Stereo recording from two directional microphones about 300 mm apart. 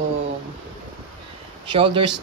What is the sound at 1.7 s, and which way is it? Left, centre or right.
Speech, centre.